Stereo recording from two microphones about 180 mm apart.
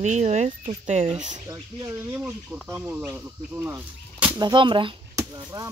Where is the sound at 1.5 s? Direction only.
15° right (ahead or behind).